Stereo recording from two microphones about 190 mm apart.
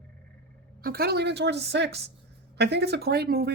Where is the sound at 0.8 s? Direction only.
55° right (ahead or behind).